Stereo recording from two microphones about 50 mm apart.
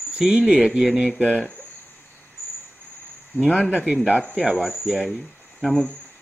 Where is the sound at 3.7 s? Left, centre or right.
Right.